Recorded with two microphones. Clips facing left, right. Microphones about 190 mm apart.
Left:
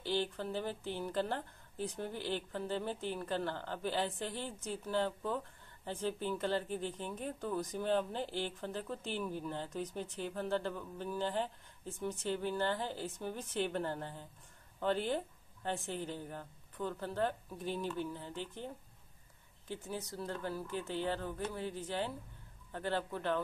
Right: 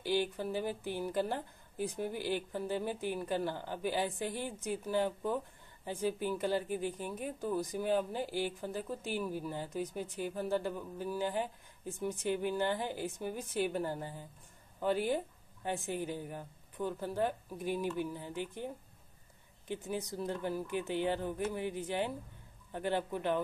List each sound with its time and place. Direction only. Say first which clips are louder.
0.0 s a woman's voice: right 3 dB; 10° right (ahead or behind)
19.7 s a woman's voice: right 4 dB; 15° right (ahead or behind)